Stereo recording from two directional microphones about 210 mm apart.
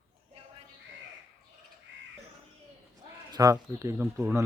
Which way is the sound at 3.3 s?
15° right (ahead or behind).